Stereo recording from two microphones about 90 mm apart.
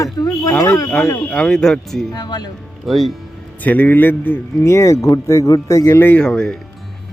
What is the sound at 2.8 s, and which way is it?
Speech, centre (ahead or behind).